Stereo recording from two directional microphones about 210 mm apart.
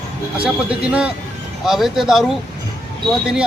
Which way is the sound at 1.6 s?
Centre (ahead or behind).